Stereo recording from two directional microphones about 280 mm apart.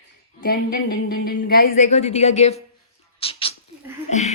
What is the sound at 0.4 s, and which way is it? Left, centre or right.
A woman's voice, left.